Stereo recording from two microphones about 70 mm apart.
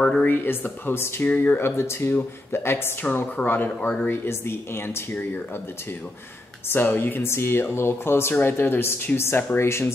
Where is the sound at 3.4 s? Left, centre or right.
Centre.